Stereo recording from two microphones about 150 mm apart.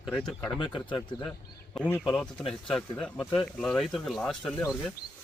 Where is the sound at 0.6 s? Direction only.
30° left (ahead or behind).